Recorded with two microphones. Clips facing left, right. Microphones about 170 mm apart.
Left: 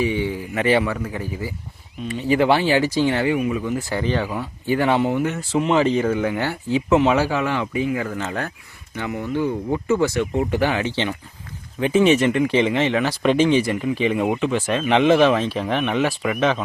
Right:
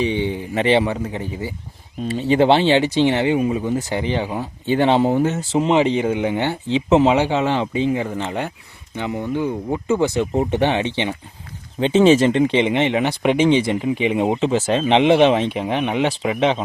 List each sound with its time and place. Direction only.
0.0 s speech: 25° right (ahead or behind)